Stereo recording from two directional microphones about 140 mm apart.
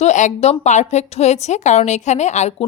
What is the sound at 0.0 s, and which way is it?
A woman's voice, 60° left (ahead or behind).